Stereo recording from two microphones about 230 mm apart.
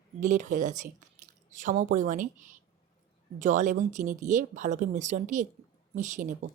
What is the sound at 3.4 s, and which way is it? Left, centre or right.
Speech, right.